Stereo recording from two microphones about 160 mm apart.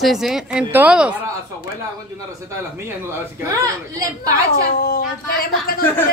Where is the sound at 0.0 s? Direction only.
Centre (ahead or behind).